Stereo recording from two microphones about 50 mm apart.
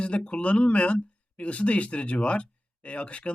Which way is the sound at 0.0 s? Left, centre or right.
Left.